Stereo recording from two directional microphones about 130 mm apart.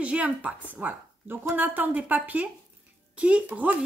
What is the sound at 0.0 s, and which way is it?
A woman's voice, 10° right (ahead or behind).